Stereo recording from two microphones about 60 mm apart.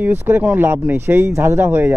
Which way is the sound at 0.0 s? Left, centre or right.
Right.